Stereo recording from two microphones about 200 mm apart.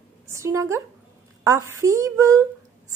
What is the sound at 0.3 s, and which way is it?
A woman's voice, 15° right (ahead or behind).